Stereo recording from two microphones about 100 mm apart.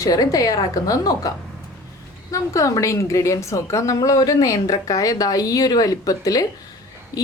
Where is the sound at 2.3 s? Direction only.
35° left (ahead or behind).